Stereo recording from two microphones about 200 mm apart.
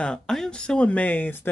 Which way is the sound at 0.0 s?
5° left (ahead or behind).